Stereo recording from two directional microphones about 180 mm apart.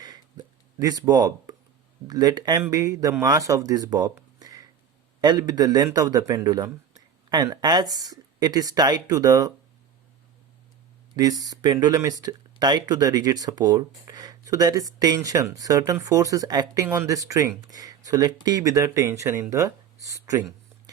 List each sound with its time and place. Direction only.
0.0 s a sound: 20° right (ahead or behind)
2.0 s speech: 20° right (ahead or behind)
11.1 s speech: 20° right (ahead or behind)